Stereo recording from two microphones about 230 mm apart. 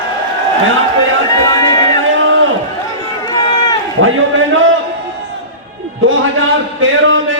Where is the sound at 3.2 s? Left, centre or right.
Centre.